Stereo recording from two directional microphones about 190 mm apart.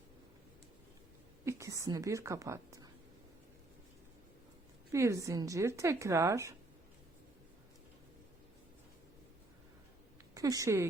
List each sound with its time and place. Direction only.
1.5 s speech: 15° right (ahead or behind)
4.9 s speech: 15° right (ahead or behind)
10.3 s speech: 20° right (ahead or behind)